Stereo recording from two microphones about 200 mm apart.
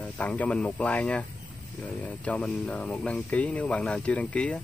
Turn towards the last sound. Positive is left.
turn(degrees=5)  # may be behind; listen again after turning